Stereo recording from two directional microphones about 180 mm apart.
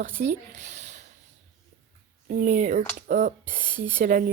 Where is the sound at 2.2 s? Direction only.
50° right (ahead or behind).